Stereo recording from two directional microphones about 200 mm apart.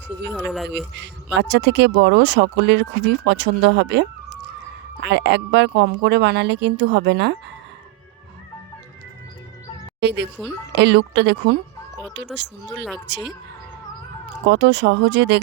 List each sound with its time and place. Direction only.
0.3 s speech: centre (ahead or behind)
0.9 s speech: 60° right (ahead or behind)
10.0 s speech: 60° right (ahead or behind)
14.4 s speech: 60° right (ahead or behind)